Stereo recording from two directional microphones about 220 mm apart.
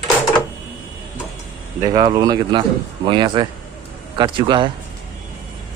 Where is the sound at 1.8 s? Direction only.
15° right (ahead or behind).